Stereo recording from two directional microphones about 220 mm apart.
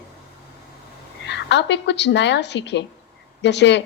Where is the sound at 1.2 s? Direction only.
50° left (ahead or behind).